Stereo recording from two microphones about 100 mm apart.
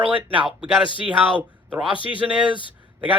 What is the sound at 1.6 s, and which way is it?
Speech, 15° right (ahead or behind).